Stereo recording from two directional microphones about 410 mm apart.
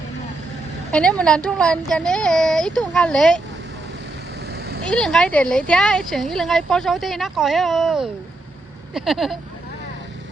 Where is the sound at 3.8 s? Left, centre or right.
Right.